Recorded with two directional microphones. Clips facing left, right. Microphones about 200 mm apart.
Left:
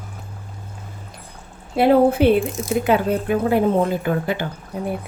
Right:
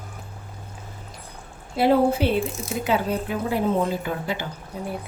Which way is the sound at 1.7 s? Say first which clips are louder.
Left 4 dB; 55° left (ahead or behind).